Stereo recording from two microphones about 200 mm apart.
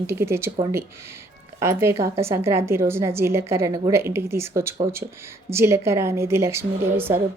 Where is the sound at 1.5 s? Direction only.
15° right (ahead or behind).